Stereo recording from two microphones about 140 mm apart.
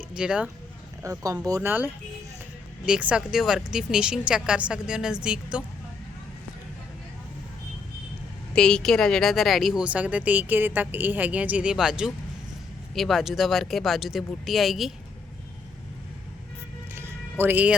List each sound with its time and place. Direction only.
0.2 s speech: 5° right (ahead or behind)
1.0 s speech: 25° right (ahead or behind)
2.8 s speech: 10° right (ahead or behind)
8.5 s a woman's voice: 5° left (ahead or behind)
16.9 s music: 15° right (ahead or behind)